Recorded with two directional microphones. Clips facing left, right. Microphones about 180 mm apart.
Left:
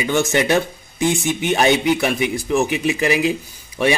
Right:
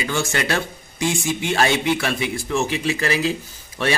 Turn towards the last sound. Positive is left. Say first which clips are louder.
# left 4 dB
turn(degrees=10)  # may be behind; listen again after turning